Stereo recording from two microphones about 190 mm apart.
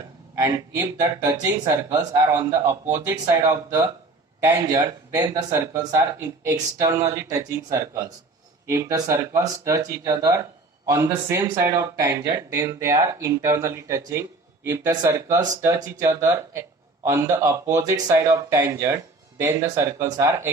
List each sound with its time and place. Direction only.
0.3 s speech: 15° right (ahead or behind)